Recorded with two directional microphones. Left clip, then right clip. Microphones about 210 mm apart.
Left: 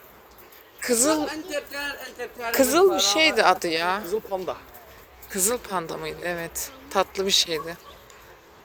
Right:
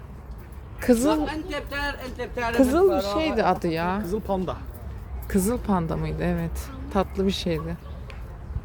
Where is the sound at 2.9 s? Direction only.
35° left (ahead or behind).